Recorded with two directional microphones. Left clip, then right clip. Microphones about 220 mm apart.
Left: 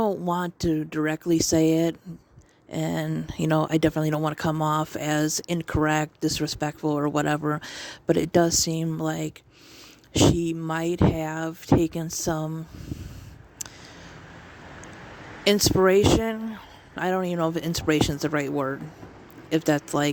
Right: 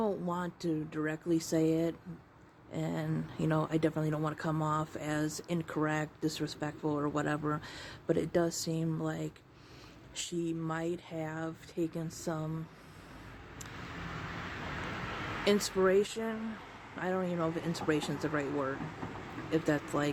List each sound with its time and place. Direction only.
0.0 s speech: 40° left (ahead or behind)
15.4 s speech: 40° left (ahead or behind)